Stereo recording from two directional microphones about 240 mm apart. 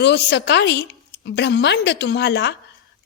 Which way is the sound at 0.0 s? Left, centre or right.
Left.